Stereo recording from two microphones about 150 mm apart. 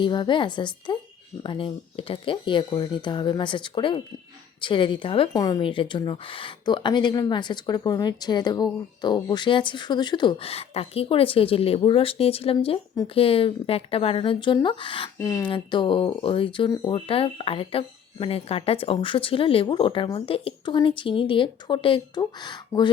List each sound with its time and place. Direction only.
0.0 s speech: 30° left (ahead or behind)
5.3 s speech: 25° left (ahead or behind)
15.2 s speech: 20° left (ahead or behind)
15.4 s speech: 35° left (ahead or behind)